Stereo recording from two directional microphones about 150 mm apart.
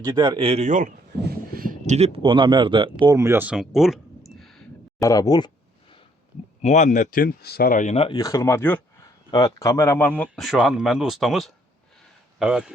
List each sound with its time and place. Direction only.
0.0 s speech: 30° right (ahead or behind); by 2.0 s 65° right (ahead or behind)
2.0 s speech: 40° right (ahead or behind)
3.2 s a sound: 15° right (ahead or behind); by 4.6 s 5° left (ahead or behind)
4.9 s a man's voice: 25° left (ahead or behind)
6.6 s speech: 50° left (ahead or behind)
8.1 s a man's voice: 25° left (ahead or behind)
9.3 s a man's voice: 25° left (ahead or behind)
10.3 s speech: centre (ahead or behind)